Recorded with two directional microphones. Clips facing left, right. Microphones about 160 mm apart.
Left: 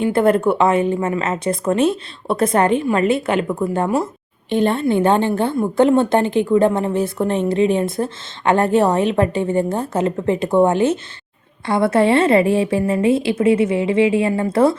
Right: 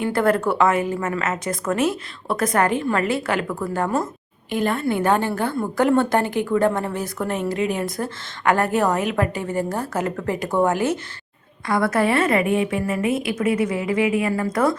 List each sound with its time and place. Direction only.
0.0 s a woman's voice: 20° left (ahead or behind)